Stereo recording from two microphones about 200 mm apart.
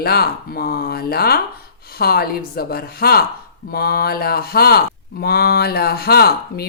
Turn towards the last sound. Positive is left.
turn(degrees=50)  # may be behind; listen again after turning